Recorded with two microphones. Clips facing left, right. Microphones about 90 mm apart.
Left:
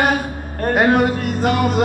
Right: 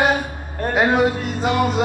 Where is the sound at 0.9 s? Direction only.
55° left (ahead or behind).